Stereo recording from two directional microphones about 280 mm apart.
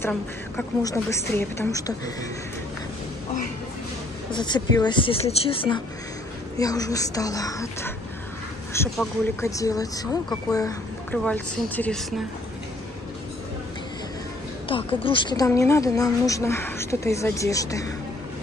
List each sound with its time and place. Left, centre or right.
0.0 s speech: centre
4.3 s speech: centre
14.7 s speech: centre